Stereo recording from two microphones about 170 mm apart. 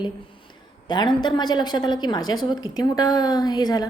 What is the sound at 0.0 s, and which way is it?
A woman's voice, 25° left (ahead or behind).